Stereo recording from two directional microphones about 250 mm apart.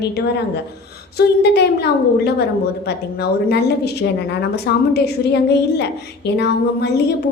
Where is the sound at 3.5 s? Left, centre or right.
Left.